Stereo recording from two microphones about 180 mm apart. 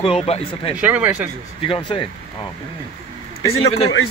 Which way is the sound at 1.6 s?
30° left (ahead or behind).